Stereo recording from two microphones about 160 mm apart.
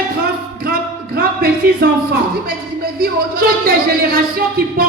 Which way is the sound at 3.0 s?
75° right (ahead or behind).